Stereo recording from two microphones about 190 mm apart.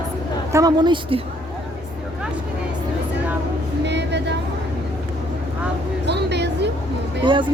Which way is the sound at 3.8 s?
65° right (ahead or behind).